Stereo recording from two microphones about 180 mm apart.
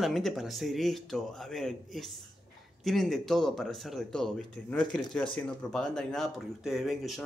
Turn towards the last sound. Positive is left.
turn(degrees=0)  # may be behind; listen again after turning